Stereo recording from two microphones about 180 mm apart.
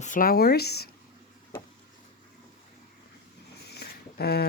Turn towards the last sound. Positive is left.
turn(degrees=60)  # may be behind; listen again after turning